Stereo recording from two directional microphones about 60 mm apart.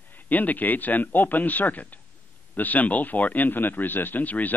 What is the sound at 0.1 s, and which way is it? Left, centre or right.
Speech, left.